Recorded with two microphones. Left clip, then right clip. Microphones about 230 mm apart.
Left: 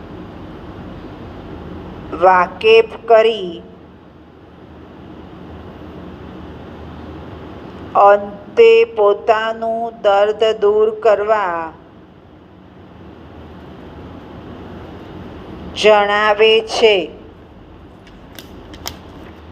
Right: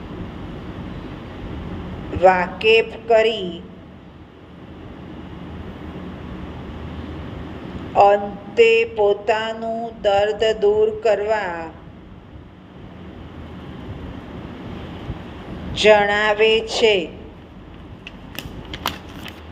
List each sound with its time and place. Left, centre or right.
2.1 s mantra: left
7.9 s mantra: left
15.7 s mantra: left